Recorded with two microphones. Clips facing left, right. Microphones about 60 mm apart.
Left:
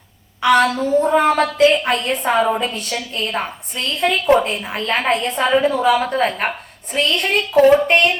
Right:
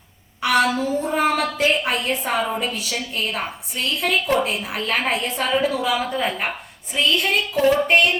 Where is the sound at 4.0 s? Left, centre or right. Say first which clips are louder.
Left 6 dB; left.